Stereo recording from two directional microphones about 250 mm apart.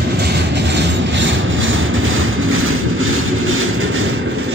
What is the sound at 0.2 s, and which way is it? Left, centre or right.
Train, right.